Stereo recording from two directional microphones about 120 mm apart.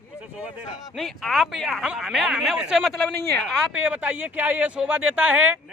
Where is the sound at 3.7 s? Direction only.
10° right (ahead or behind).